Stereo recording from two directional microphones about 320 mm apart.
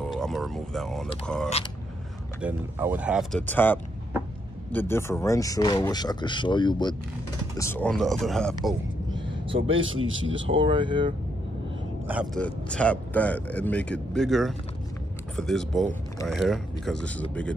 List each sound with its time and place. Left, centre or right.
0.0 s speech: centre
9.1 s vehicle: centre
9.6 s speech: right
10.6 s speech: centre
12.1 s speech: centre